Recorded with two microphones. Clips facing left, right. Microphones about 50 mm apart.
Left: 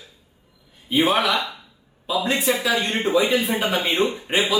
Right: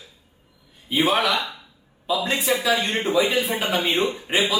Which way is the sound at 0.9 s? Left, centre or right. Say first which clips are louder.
Left 1 dB; centre.